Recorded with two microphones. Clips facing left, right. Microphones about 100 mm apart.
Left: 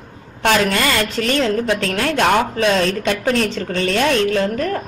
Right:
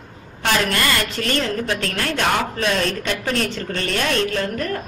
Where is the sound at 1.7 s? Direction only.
90° left.